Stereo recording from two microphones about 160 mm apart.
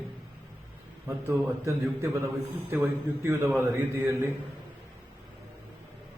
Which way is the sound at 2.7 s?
15° right (ahead or behind).